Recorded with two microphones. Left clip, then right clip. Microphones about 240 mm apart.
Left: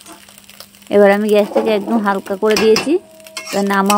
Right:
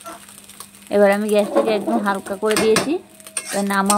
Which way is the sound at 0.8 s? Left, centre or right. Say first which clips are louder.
Left 5 dB; left.